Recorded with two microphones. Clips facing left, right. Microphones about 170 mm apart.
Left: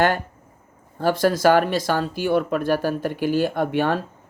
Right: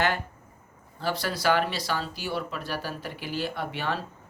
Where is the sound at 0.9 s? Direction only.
50° left (ahead or behind).